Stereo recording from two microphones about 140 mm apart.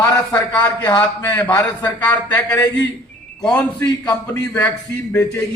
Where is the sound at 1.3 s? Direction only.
30° left (ahead or behind).